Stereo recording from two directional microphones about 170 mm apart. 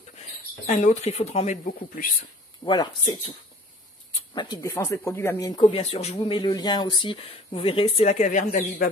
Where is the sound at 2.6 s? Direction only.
25° left (ahead or behind).